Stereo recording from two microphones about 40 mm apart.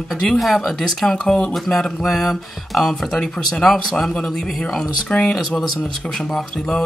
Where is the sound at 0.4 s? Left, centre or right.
Centre.